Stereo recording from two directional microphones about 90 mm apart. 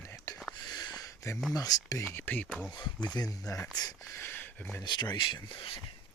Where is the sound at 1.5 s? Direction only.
45° left (ahead or behind).